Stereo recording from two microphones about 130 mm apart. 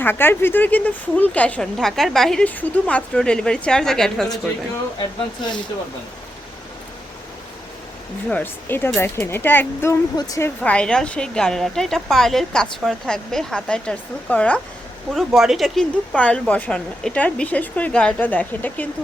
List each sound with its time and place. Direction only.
0.0 s speech: 15° left (ahead or behind)
8.3 s speech: 15° left (ahead or behind)
10.6 s a woman's voice: 10° left (ahead or behind)
15.1 s speech: centre (ahead or behind)